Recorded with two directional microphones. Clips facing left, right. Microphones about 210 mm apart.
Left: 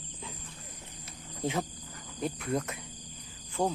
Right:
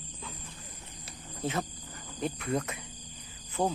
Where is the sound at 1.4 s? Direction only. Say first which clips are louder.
Left 1 dB; 15° left (ahead or behind).